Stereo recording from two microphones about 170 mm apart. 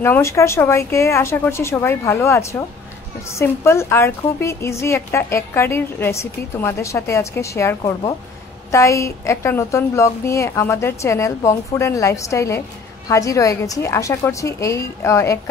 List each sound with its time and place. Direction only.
0.0 s a woman's voice: 15° left (ahead or behind)